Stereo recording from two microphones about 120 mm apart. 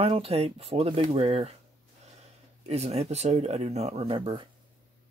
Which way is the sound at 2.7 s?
60° right (ahead or behind).